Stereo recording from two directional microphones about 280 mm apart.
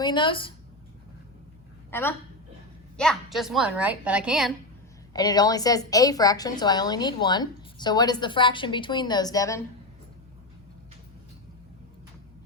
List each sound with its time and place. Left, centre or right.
0.0 s a woman's voice: centre
1.9 s a woman's voice: centre
5.1 s a woman's voice: centre